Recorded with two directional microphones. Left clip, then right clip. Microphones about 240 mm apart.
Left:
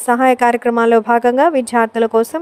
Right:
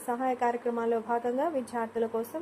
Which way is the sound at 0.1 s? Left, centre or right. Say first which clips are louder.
Left 17 dB; left.